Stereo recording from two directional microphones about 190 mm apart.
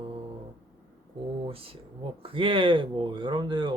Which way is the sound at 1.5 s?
30° right (ahead or behind).